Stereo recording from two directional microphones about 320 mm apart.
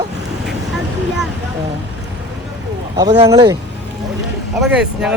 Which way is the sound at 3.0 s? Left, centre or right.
Centre.